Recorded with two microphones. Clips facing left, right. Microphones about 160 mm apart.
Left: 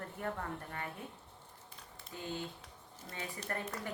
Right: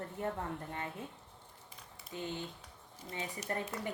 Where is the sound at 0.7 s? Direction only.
20° right (ahead or behind).